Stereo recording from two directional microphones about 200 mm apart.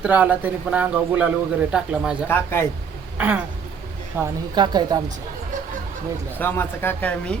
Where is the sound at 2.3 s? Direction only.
10° left (ahead or behind).